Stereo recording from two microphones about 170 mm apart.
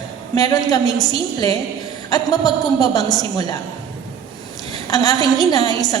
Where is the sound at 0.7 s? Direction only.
20° left (ahead or behind).